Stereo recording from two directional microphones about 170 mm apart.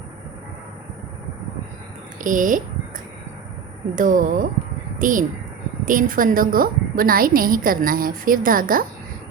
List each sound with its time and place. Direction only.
2.2 s speech: 50° right (ahead or behind)
3.9 s a woman's voice: 50° right (ahead or behind)